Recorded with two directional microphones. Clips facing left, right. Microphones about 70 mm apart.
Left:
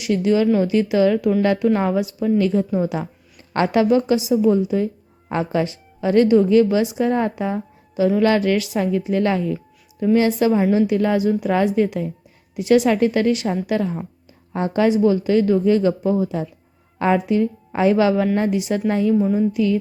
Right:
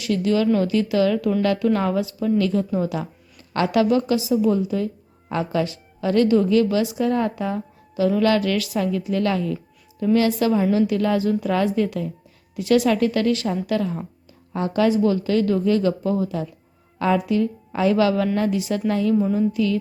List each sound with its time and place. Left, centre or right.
0.0 s speech: left